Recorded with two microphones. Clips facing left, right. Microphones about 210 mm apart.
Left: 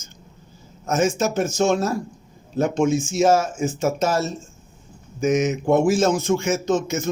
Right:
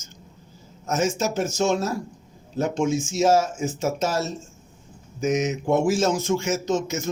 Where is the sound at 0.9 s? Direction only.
55° left (ahead or behind).